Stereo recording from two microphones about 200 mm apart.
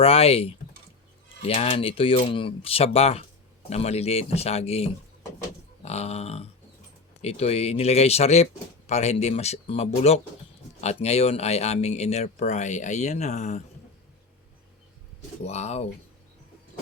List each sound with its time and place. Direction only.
0.0 s speech: 30° left (ahead or behind)
15.4 s speech: 35° left (ahead or behind)